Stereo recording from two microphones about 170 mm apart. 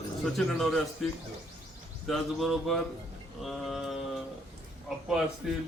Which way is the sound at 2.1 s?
Centre (ahead or behind).